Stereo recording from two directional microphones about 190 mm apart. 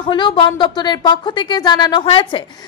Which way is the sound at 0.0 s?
25° left (ahead or behind).